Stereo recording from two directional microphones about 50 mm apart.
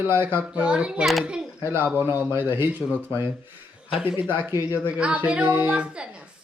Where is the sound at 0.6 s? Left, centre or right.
Right.